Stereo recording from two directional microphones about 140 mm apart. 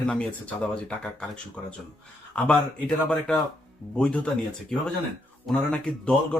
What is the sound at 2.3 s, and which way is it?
A man's voice, 5° left (ahead or behind).